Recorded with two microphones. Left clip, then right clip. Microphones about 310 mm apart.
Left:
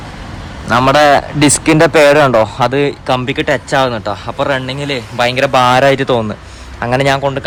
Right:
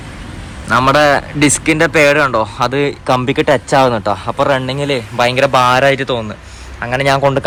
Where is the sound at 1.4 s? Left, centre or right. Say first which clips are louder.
Left 3 dB; centre.